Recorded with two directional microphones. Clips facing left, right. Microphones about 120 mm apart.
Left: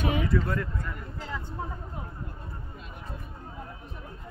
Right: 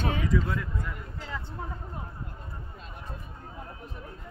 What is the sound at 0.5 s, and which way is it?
Speech, centre (ahead or behind).